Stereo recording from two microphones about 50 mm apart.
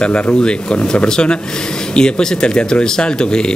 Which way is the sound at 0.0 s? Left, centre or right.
Left.